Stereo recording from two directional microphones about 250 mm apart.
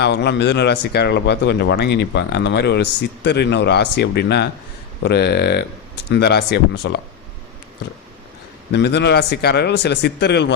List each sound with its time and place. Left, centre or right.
0.0 s speech: left
8.7 s speech: left